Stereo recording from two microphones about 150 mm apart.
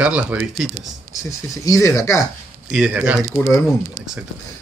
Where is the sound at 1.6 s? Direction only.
20° left (ahead or behind).